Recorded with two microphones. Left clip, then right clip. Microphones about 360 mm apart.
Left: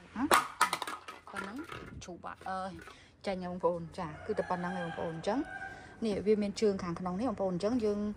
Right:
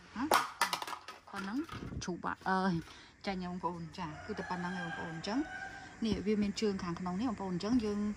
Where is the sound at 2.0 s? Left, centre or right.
Centre.